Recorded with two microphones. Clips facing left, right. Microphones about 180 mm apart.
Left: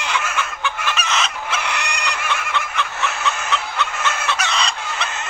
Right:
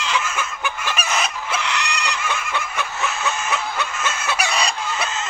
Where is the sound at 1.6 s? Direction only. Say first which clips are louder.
Even; 55° left (ahead or behind).